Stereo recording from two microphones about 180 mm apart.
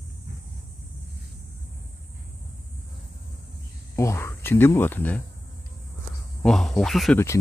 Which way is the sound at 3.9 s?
15° left (ahead or behind).